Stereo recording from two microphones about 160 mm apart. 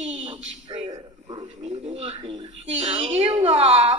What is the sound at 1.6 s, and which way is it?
Speech, 40° right (ahead or behind).